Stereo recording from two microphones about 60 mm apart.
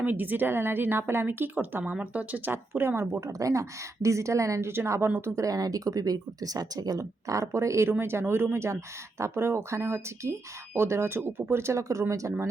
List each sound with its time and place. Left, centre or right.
0.0 s a woman's voice: right
1.8 s speech: centre
2.5 s speech: right
4.7 s speech: right
5.3 s speech: right
7.9 s speech: right